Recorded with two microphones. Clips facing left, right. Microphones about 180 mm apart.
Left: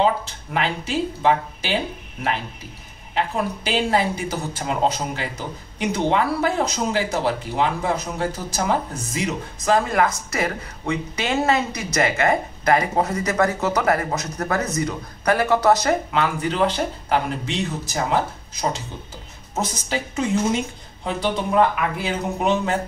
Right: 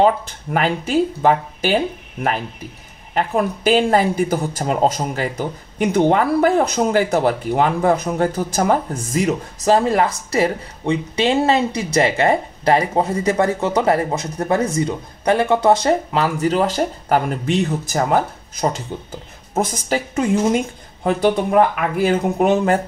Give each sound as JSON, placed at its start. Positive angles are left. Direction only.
{"t": 0.0, "sound": "speech", "side_deg": -50}
{"t": 3.2, "sound": "speech", "side_deg": -45}
{"t": 9.7, "sound": "speech", "side_deg": -30}